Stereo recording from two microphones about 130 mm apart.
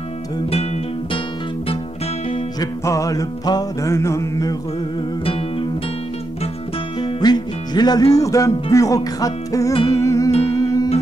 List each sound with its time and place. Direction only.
2.6 s music: 25° left (ahead or behind)
5.2 s music: 45° left (ahead or behind)
7.0 s music: 35° left (ahead or behind)